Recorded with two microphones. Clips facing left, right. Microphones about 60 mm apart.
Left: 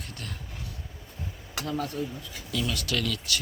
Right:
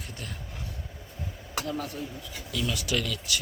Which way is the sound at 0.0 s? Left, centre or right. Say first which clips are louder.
Even; centre.